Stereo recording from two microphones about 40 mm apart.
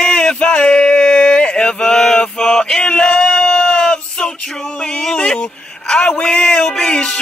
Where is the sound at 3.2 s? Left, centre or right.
Left.